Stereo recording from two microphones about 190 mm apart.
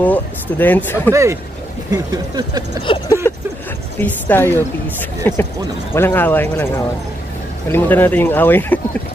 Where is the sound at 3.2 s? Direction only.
10° left (ahead or behind).